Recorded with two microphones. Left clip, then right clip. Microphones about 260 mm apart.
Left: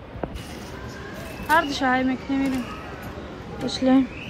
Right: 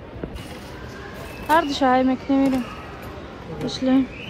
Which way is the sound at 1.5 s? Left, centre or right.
Centre.